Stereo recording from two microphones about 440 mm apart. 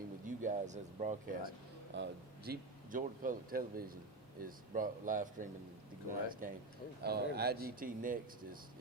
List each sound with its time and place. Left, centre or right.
0.4 s speech: centre